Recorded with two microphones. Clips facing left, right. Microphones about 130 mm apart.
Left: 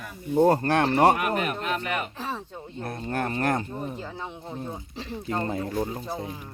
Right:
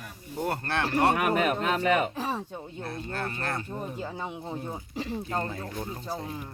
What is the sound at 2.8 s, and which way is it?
Speech, 50° left (ahead or behind).